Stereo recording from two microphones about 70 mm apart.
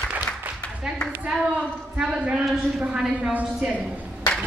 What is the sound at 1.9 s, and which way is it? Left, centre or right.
Speech, centre.